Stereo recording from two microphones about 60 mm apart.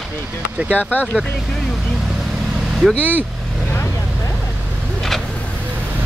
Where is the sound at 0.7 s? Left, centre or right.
Left.